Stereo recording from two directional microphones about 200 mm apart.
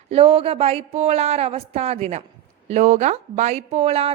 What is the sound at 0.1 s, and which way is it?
A woman's voice, 30° right (ahead or behind).